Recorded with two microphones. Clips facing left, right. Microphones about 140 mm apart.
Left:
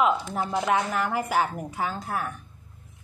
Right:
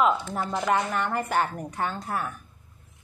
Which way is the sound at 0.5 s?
5° left (ahead or behind).